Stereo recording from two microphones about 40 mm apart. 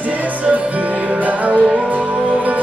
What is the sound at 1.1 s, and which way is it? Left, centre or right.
Music, right.